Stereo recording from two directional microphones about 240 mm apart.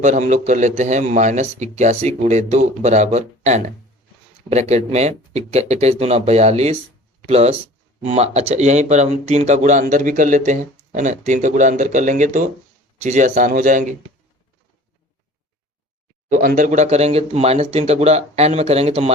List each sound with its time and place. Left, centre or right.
0.0 s speech: right
16.3 s speech: right